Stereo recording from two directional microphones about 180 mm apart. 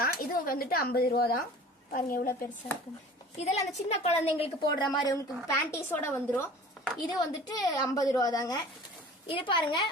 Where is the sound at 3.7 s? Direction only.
35° left (ahead or behind).